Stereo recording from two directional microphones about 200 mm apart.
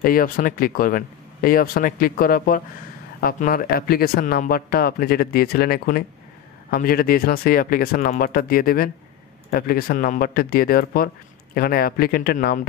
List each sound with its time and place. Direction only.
0.0 s speech: 45° left (ahead or behind)